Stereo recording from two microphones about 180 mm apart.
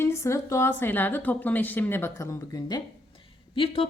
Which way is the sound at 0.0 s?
15° left (ahead or behind).